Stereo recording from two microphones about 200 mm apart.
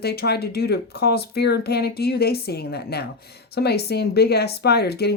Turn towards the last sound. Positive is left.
turn(degrees=55)  # may be behind; listen again after turning